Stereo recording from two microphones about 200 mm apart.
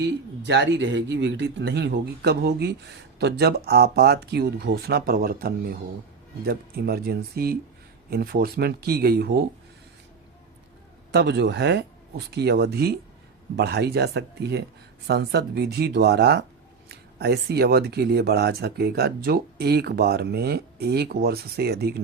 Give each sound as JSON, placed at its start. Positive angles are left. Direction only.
{"t": 0.0, "sound": "speech", "side_deg": -60}
{"t": 11.1, "sound": "speech", "side_deg": -55}